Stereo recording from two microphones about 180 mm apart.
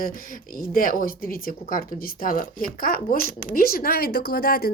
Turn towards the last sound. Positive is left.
turn(degrees=60)  # may be behind; listen again after turning